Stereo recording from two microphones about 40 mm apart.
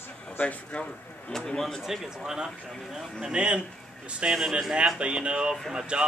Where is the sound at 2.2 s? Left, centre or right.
Right.